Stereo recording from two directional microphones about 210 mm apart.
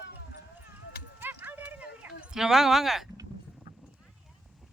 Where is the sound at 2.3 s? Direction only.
Centre (ahead or behind).